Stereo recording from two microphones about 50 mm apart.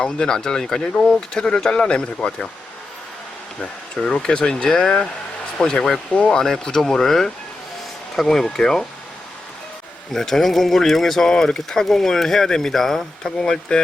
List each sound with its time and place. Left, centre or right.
0.0 s speech: centre
3.6 s speech: centre
6.4 s speech: centre
10.1 s speech: centre